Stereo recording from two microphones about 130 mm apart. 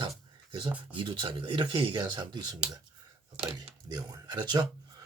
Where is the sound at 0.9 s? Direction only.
40° right (ahead or behind).